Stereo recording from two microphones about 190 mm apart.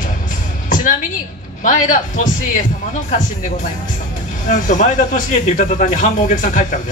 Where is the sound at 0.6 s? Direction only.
45° left (ahead or behind).